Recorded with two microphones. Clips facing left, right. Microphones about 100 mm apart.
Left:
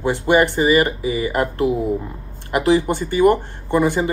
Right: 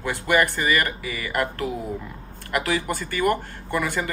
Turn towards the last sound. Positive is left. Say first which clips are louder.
# left 8 dB
turn(degrees=20)  # may be behind; listen again after turning